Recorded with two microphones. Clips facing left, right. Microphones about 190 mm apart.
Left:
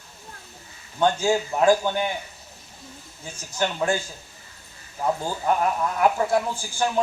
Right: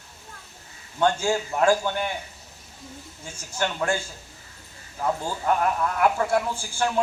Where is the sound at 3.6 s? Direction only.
15° left (ahead or behind).